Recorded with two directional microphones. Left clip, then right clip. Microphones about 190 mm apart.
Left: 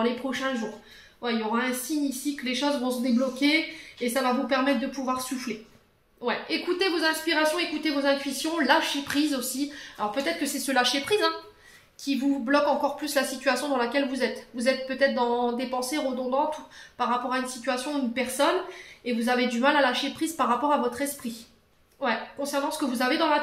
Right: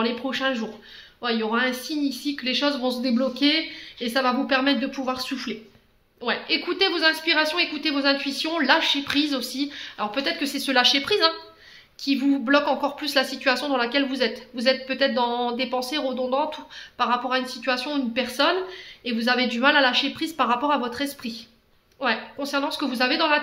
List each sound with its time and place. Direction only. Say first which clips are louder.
0.0 s a woman's voice: right 3 dB; 30° right (ahead or behind)
6.2 s a woman's voice: right 3 dB; 25° right (ahead or behind)